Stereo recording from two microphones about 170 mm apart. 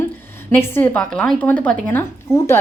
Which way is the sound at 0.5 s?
10° left (ahead or behind).